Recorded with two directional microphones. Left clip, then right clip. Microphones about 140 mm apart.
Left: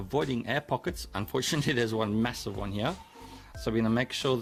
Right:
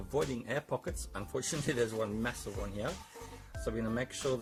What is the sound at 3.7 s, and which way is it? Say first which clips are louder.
Speech: left 7 dB; 70° left (ahead or behind).